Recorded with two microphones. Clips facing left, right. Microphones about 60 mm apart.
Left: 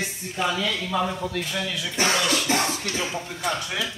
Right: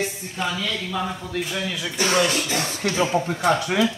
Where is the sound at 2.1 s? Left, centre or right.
Right.